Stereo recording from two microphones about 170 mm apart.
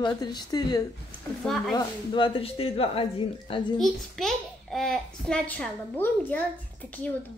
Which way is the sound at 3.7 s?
Centre (ahead or behind).